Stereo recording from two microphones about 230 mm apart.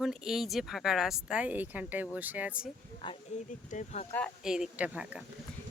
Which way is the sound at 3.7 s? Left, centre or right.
Left.